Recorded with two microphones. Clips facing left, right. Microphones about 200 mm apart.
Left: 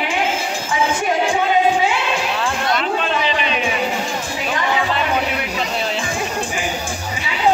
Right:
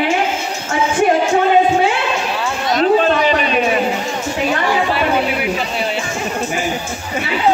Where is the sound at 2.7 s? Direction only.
45° right (ahead or behind).